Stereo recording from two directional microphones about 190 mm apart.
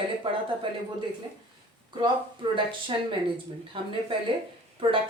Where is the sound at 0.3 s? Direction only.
25° right (ahead or behind).